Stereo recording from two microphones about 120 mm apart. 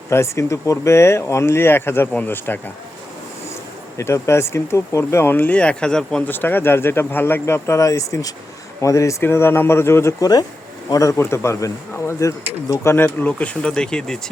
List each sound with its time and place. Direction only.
0.1 s speech: 25° left (ahead or behind)
3.9 s speech: 25° left (ahead or behind); by 14.2 s 5° left (ahead or behind)